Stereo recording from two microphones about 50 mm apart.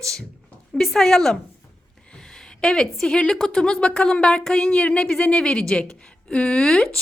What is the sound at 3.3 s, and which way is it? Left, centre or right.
Speech, centre.